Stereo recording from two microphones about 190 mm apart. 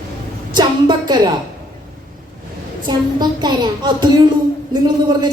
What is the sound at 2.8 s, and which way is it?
A child's voice, 20° right (ahead or behind).